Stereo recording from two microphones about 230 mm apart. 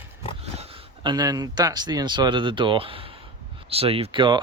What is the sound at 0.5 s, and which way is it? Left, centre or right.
Speech, right.